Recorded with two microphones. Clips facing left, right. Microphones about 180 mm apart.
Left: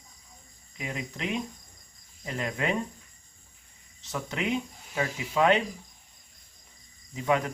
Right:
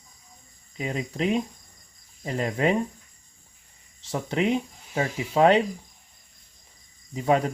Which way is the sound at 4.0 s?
30° right (ahead or behind).